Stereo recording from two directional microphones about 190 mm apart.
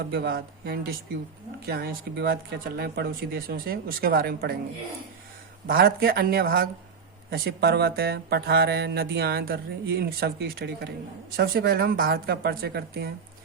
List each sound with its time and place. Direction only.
0.1 s speech: 55° right (ahead or behind)
5.6 s speech: 55° right (ahead or behind)